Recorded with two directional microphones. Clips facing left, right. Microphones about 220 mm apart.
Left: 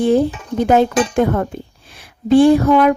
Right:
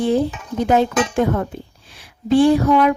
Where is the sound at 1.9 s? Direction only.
50° left (ahead or behind).